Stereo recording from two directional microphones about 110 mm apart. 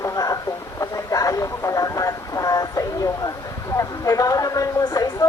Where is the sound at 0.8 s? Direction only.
30° left (ahead or behind).